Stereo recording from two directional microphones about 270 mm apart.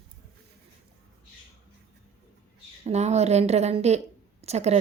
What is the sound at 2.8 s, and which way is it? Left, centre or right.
A woman's voice, right.